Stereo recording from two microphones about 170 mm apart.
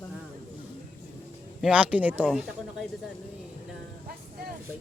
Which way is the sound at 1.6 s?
10° right (ahead or behind).